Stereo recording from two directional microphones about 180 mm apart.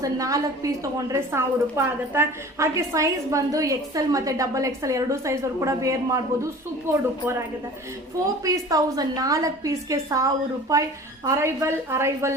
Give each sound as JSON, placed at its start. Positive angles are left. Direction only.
{"t": 0.0, "sound": "a woman's voice", "side_deg": -20}
{"t": 8.4, "sound": "a woman's voice", "side_deg": -20}